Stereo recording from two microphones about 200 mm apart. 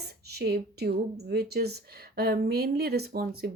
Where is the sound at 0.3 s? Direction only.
50° right (ahead or behind).